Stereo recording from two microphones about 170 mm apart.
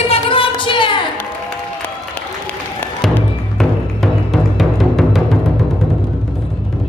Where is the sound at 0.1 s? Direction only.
30° left (ahead or behind).